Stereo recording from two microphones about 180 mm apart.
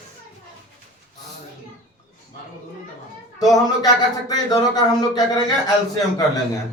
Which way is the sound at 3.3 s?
20° left (ahead or behind).